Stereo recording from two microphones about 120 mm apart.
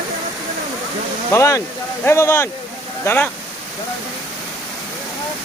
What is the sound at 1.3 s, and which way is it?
Speech, 25° left (ahead or behind).